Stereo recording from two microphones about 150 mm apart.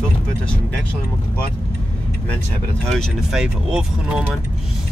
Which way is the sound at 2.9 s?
Centre (ahead or behind).